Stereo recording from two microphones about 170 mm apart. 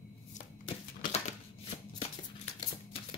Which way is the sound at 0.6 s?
35° left (ahead or behind).